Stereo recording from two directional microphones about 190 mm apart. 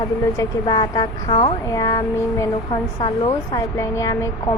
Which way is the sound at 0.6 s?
25° left (ahead or behind).